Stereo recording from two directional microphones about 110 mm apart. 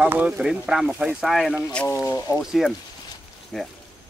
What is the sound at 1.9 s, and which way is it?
Speech, 25° left (ahead or behind).